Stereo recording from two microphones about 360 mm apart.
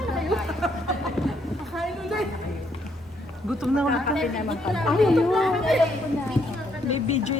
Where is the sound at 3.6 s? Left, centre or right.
Centre.